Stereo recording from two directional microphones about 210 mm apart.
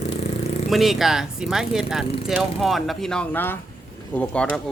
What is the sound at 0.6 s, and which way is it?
Speech, centre (ahead or behind).